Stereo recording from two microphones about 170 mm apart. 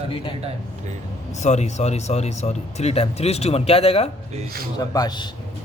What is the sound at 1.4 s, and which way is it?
Speech, 40° left (ahead or behind).